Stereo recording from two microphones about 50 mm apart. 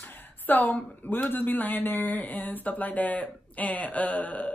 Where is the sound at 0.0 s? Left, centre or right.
Left.